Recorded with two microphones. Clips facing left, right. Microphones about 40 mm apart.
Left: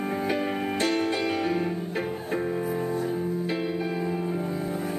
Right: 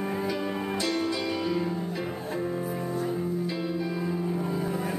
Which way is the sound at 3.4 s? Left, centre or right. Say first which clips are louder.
Left 2 dB; left.